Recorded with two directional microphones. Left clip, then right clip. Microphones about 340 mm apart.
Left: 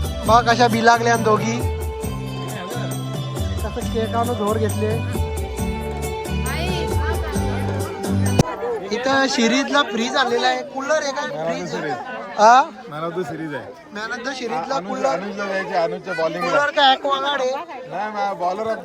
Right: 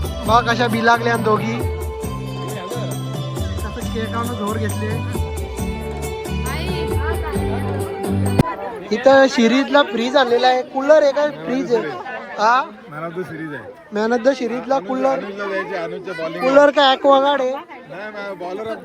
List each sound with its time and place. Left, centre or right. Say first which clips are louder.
0.3 s a man's voice: left 1 dB; centre
3.9 s a man's voice: left 3 dB; centre
6.5 s music: even; centre
8.0 s music: even; centre
8.9 s a man's voice: right 8 dB; centre
12.4 s speech: left 4 dB; centre
13.9 s a man's voice: right 10 dB; centre
15.4 s speech: left 2 dB; left
16.6 s a man's voice: right 4 dB; centre
18.2 s speech: left 5 dB; left